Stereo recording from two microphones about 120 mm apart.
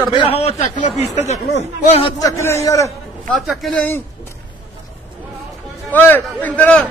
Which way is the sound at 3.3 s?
Centre (ahead or behind).